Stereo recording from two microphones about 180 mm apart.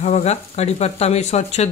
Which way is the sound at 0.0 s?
40° left (ahead or behind).